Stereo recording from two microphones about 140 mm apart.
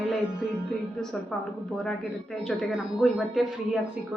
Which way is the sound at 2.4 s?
Centre (ahead or behind).